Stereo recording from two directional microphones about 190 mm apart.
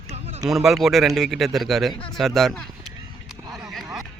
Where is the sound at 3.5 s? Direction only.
Centre (ahead or behind).